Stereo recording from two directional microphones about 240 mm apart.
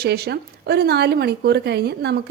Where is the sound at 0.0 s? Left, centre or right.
Right.